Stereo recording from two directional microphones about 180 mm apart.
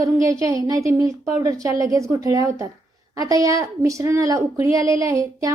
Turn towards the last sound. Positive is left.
turn(degrees=-15)  # may be behind; listen again after turning